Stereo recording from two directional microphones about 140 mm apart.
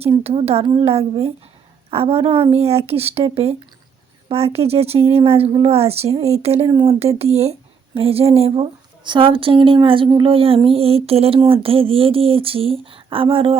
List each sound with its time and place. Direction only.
0.2 s a woman's voice: 45° right (ahead or behind)
6.7 s speech: 30° right (ahead or behind)
7.2 s a woman's voice: 50° right (ahead or behind)